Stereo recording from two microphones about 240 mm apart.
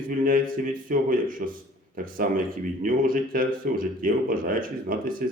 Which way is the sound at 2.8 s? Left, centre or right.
Right.